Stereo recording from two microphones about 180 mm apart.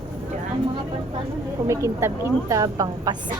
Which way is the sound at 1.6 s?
15° right (ahead or behind).